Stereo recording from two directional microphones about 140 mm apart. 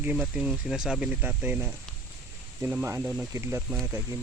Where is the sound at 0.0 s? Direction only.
10° right (ahead or behind).